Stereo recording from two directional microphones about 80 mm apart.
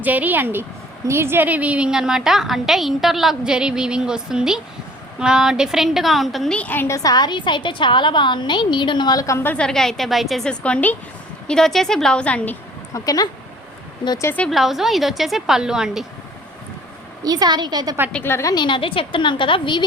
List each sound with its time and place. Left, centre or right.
0.0 s a woman's voice: right
1.5 s a woman's voice: centre
6.5 s a woman's voice: centre
6.8 s a woman's voice: left
9.6 s a woman's voice: centre
10.5 s a woman's voice: centre
12.9 s speech: left
14.5 s a woman's voice: centre
17.2 s a woman's voice: right
18.2 s a woman's voice: left
18.4 s a woman's voice: left